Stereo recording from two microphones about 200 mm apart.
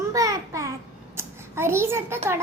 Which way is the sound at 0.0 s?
15° right (ahead or behind).